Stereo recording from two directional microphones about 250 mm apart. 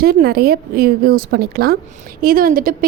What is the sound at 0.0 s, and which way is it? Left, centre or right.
A woman's voice, right.